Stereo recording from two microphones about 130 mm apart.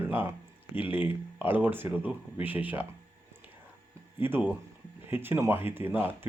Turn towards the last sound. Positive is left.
turn(degrees=-15)  # may be behind; listen again after turning